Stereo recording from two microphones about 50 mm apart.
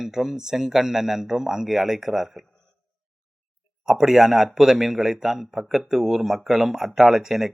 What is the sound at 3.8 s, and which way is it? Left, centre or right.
Speech, centre.